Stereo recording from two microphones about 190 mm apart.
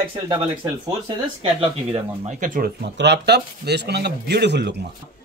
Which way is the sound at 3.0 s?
60° right (ahead or behind).